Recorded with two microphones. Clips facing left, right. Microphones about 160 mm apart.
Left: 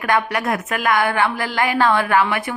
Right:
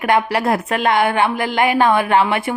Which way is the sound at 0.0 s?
25° right (ahead or behind).